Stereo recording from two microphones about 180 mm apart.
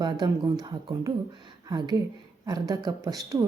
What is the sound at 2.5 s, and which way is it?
Speech, 20° right (ahead or behind).